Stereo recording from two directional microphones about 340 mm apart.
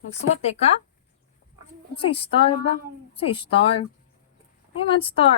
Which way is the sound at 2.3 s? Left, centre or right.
Centre.